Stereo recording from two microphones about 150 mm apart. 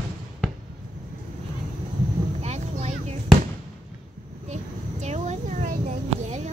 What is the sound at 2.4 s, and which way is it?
Boat, 45° right (ahead or behind).